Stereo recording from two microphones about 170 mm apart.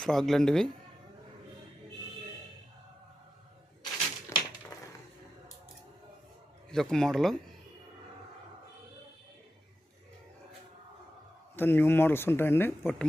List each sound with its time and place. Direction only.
0.0 s speech: centre (ahead or behind)
4.3 s typewriter: 15° left (ahead or behind)
4.7 s a sound: 25° left (ahead or behind)
6.7 s speech: 5° left (ahead or behind)
11.5 s speech: 10° left (ahead or behind)